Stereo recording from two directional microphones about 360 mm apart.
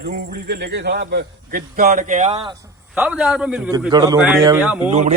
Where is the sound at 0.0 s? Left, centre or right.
Right; by 4.8 s centre.